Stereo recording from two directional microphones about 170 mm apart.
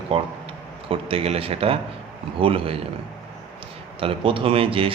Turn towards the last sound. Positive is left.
turn(degrees=-30)  # may be behind; listen again after turning